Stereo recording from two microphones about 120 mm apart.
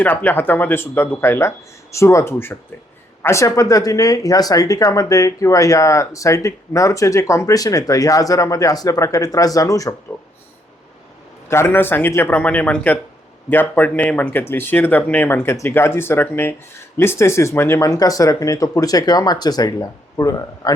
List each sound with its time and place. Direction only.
0.0 s speech: 15° left (ahead or behind)
11.4 s speech: 20° left (ahead or behind)